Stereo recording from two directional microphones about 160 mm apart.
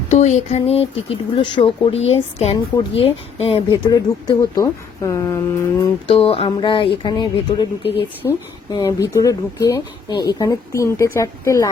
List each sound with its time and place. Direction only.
0.1 s speech: 45° left (ahead or behind)
3.8 s speech: 25° left (ahead or behind)
6.1 s speech: 35° left (ahead or behind); by 11.7 s 20° left (ahead or behind)